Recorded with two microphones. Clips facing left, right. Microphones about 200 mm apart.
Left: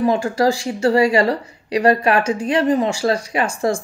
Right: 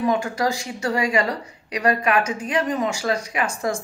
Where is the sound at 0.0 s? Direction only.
30° left (ahead or behind).